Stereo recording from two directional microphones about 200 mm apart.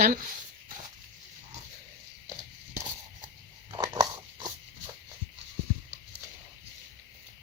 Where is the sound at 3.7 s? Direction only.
20° right (ahead or behind).